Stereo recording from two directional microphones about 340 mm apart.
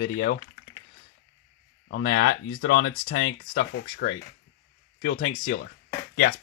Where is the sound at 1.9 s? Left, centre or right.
Left.